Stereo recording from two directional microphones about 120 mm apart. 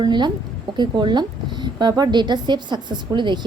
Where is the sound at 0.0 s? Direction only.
40° right (ahead or behind).